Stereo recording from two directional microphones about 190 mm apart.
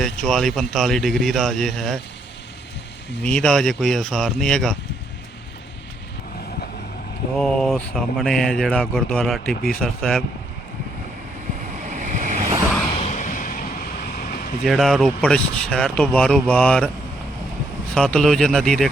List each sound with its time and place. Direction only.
0.0 s speech: centre (ahead or behind)
3.2 s speech: 5° left (ahead or behind)
7.3 s speech: 5° left (ahead or behind)
11.9 s vehicle: 40° right (ahead or behind)
13.0 s vehicle: 40° left (ahead or behind)
14.6 s speech: centre (ahead or behind)
17.9 s speech: 5° left (ahead or behind)